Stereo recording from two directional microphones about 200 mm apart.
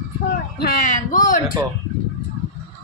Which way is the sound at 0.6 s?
45° left (ahead or behind).